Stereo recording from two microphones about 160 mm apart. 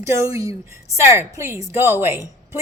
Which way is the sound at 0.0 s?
20° right (ahead or behind).